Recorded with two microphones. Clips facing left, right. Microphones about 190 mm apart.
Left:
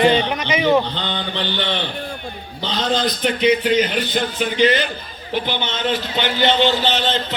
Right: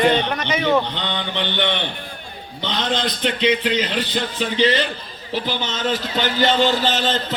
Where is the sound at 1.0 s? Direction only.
20° right (ahead or behind).